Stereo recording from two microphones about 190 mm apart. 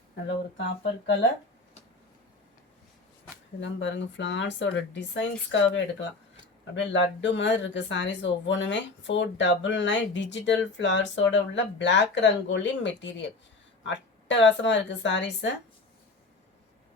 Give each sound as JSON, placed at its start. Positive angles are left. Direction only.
{"t": 0.5, "sound": "speech", "side_deg": 70}
{"t": 3.6, "sound": "speech", "side_deg": 75}